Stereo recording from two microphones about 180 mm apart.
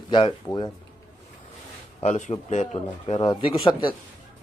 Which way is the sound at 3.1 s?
30° left (ahead or behind).